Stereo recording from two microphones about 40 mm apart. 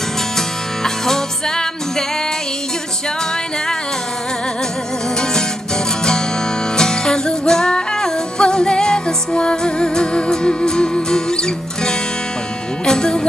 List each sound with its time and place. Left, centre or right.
0.8 s music: centre
6.8 s music: centre